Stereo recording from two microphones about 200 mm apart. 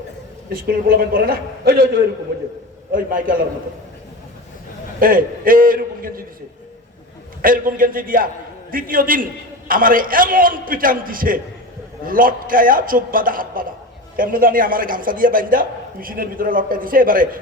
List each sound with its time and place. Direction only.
0.5 s a man's voice: 45° right (ahead or behind)
2.9 s a man's voice: 45° right (ahead or behind)
4.9 s a man's voice: 45° right (ahead or behind)
7.4 s a man's voice: 45° right (ahead or behind)